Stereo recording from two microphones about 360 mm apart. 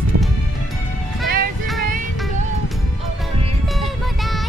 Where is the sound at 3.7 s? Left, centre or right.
Centre.